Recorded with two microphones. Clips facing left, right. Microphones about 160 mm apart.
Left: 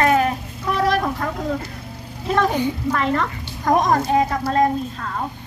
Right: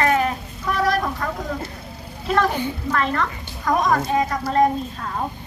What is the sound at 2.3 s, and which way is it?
Speech, 20° left (ahead or behind).